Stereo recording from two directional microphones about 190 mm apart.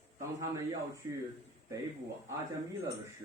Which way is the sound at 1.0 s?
20° right (ahead or behind).